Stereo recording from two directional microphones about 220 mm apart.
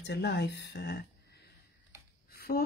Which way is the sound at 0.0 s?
50° left (ahead or behind).